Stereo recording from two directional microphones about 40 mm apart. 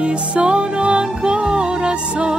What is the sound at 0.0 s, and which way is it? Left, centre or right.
Music, right.